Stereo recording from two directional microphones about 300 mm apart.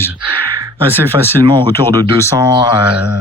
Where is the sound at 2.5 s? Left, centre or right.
Centre.